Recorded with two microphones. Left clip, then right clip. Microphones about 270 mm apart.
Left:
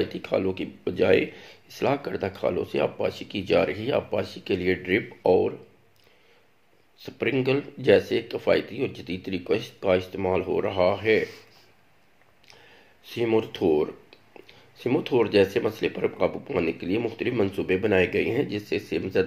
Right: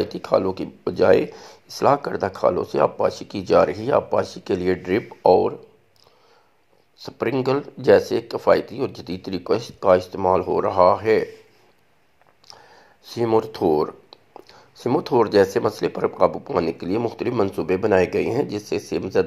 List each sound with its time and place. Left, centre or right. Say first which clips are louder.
0.0 s speech: right 5 dB; right
7.0 s speech: right 3 dB; right
12.5 s a sound: right 7 dB; right
13.2 s speech: right 4 dB; right